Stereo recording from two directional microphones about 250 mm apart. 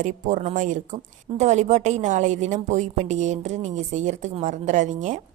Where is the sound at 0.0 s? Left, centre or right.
Right.